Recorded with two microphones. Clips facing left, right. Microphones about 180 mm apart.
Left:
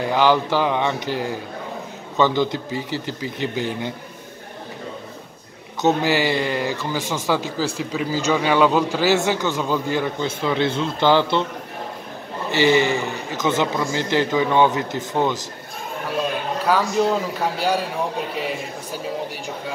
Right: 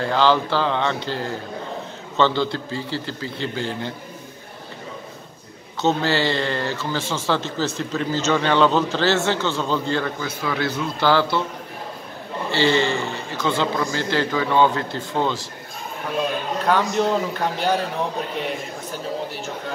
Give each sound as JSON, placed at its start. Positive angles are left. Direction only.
{"t": 0.0, "sound": "a man's voice", "side_deg": 15}
{"t": 5.8, "sound": "a man's voice", "side_deg": 15}
{"t": 12.4, "sound": "a man's voice", "side_deg": 15}
{"t": 16.6, "sound": "a man's voice", "side_deg": 5}